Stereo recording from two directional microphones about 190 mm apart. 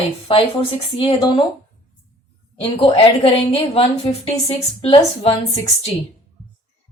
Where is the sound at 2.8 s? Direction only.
30° left (ahead or behind).